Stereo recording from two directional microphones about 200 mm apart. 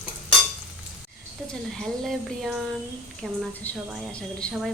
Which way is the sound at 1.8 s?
Centre (ahead or behind).